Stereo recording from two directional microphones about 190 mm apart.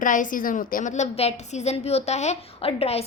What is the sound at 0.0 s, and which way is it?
A woman's voice, 45° left (ahead or behind).